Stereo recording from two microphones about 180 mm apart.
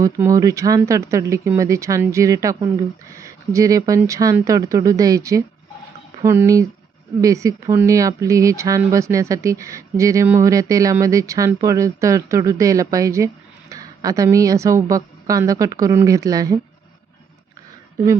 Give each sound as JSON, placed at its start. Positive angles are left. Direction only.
{"t": 0.0, "sound": "speech", "side_deg": -20}